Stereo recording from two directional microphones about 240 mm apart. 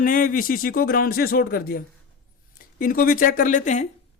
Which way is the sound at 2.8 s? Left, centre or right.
Left.